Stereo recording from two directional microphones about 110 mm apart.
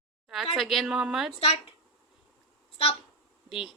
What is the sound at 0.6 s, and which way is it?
Speech, centre (ahead or behind).